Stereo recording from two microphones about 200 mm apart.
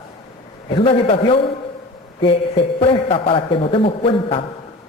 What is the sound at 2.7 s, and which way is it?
A man's voice, 25° left (ahead or behind).